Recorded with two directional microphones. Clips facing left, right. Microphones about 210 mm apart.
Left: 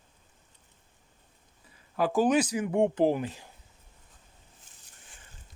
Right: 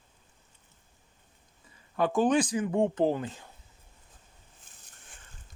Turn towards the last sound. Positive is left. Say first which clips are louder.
# right 1 dB
turn(degrees=-50)  # may be behind; listen again after turning